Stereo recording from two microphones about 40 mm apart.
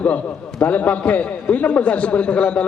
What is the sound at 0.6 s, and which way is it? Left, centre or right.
A man's voice, left.